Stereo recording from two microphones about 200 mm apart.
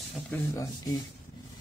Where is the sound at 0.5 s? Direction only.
20° left (ahead or behind).